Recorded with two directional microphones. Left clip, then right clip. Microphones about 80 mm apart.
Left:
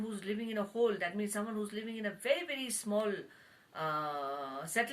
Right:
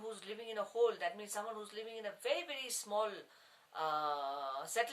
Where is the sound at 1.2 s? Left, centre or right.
Right.